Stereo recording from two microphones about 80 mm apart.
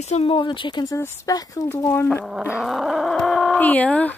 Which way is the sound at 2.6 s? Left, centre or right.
Centre.